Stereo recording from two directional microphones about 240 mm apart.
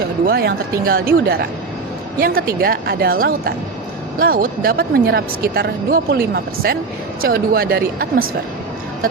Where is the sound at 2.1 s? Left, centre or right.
Right.